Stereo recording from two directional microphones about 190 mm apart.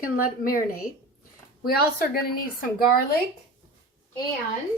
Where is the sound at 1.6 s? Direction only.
50° left (ahead or behind).